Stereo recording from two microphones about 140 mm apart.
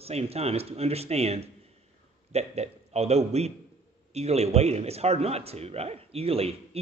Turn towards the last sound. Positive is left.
turn(degrees=-45)  # may be behind; listen again after turning